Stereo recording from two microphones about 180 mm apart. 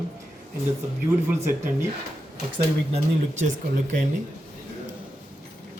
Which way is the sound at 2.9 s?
40° right (ahead or behind).